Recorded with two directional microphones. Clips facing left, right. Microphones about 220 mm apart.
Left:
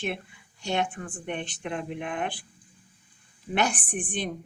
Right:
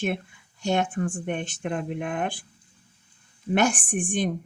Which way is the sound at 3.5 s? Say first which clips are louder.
Right 5 dB; 45° right (ahead or behind).